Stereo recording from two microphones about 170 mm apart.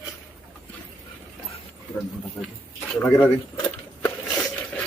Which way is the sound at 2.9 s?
15° left (ahead or behind).